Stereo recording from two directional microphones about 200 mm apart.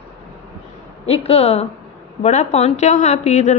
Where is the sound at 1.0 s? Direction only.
30° left (ahead or behind).